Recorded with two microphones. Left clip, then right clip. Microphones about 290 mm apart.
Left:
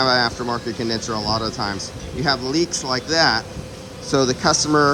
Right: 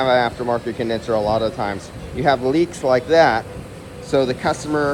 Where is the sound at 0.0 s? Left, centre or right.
Centre.